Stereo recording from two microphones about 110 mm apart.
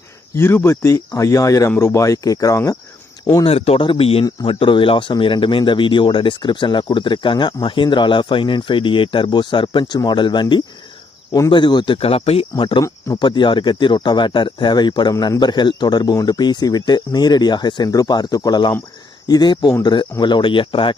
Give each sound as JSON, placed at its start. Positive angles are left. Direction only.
{"t": 0.3, "sound": "speech", "side_deg": 20}
{"t": 3.4, "sound": "speech", "side_deg": 60}
{"t": 11.9, "sound": "speech", "side_deg": 60}